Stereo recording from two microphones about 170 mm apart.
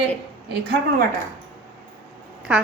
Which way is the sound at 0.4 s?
75° right (ahead or behind).